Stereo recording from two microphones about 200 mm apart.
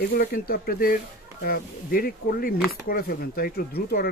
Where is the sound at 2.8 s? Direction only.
50° left (ahead or behind).